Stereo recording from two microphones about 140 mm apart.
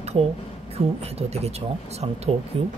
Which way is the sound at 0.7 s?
45° right (ahead or behind).